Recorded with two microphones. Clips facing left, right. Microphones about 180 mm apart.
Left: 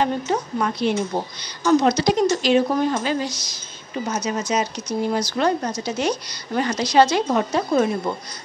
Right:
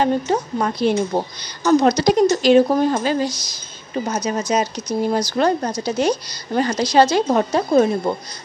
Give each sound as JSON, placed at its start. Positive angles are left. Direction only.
{"t": 0.0, "sound": "speech", "side_deg": -35}